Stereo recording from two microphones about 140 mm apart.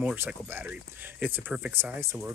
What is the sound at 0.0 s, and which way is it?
Speech, 10° right (ahead or behind).